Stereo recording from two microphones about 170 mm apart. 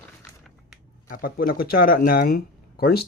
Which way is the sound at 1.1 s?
60° left (ahead or behind).